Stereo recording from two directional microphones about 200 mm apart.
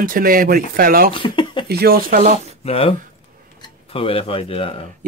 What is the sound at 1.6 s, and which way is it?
Speech, 50° right (ahead or behind).